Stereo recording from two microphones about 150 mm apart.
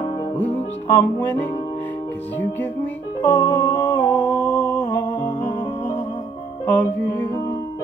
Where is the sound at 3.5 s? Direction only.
15° left (ahead or behind).